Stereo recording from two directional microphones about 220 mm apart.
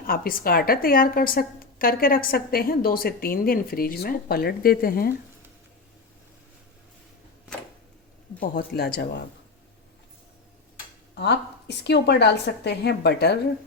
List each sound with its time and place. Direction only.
0.1 s a woman's voice: 40° left (ahead or behind)
8.4 s a woman's voice: 45° left (ahead or behind)
11.2 s a woman's voice: 50° left (ahead or behind)